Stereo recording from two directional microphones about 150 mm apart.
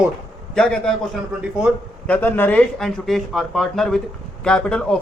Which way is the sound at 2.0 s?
10° left (ahead or behind).